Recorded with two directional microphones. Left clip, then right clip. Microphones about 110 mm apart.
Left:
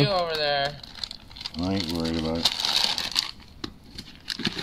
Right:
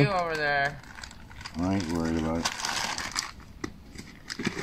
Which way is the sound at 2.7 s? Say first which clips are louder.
Left 7 dB; 25° left (ahead or behind).